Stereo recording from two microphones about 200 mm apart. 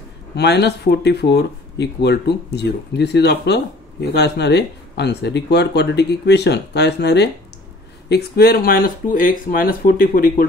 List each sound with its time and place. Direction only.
0.4 s speech: 55° left (ahead or behind)